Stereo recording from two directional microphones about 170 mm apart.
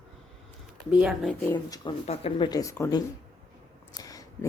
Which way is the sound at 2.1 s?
35° left (ahead or behind).